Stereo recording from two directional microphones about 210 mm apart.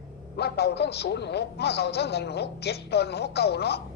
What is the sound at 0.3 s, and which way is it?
A man's voice, 50° left (ahead or behind).